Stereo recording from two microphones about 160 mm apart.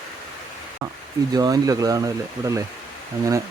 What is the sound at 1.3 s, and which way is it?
Speech, 25° right (ahead or behind).